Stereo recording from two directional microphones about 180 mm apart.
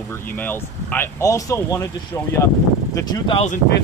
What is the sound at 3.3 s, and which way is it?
Speech, 35° left (ahead or behind).